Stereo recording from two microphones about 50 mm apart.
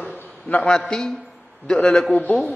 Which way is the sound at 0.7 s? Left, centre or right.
Centre.